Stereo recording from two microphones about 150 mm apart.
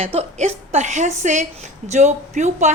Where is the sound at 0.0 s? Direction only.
40° right (ahead or behind).